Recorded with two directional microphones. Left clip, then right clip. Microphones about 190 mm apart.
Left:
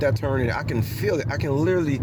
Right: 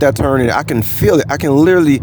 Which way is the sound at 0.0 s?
45° right (ahead or behind).